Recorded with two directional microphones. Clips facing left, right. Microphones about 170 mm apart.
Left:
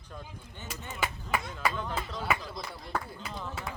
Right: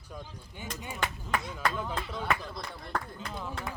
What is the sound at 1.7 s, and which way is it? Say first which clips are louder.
Speech: right 1 dB; 5° right (ahead or behind).